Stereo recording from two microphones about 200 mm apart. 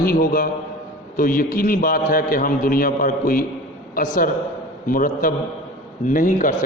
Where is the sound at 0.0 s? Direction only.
45° left (ahead or behind).